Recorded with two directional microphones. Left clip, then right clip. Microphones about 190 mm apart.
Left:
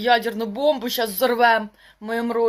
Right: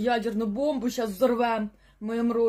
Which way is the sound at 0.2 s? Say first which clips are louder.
Left 4 dB; 35° left (ahead or behind).